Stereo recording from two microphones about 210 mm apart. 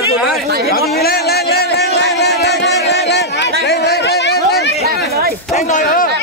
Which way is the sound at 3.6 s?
50° left (ahead or behind).